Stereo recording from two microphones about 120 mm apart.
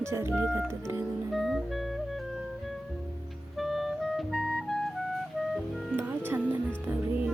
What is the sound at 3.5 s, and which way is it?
Clarinet, centre (ahead or behind).